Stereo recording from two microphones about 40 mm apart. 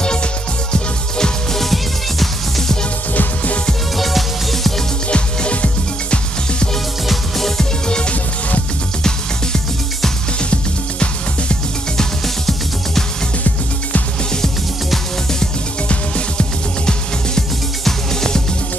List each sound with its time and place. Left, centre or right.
1.1 s music: centre
1.6 s music: centre
3.9 s music: centre
5.1 s music: left
7.1 s music: centre
10.5 s music: left
12.0 s music: centre
17.8 s music: centre